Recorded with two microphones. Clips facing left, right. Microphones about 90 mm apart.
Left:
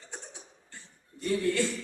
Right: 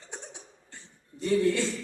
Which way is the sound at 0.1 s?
20° right (ahead or behind).